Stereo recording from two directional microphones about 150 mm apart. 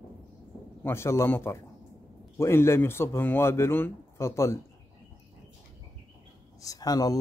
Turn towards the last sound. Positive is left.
turn(degrees=25)  # may be behind; listen again after turning